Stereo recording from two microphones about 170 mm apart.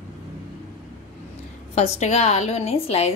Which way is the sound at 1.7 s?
40° left (ahead or behind).